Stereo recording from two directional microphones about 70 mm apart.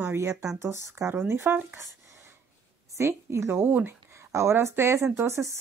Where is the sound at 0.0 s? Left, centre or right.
Right.